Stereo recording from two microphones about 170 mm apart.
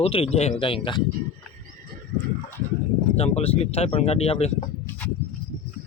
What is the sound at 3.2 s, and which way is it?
Speech, 35° left (ahead or behind).